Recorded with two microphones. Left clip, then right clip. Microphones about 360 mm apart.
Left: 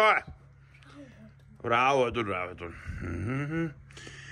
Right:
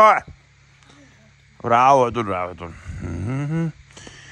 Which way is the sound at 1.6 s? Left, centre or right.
Right.